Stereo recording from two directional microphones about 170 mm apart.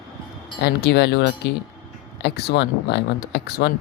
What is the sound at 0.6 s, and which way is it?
Speech, 75° left (ahead or behind).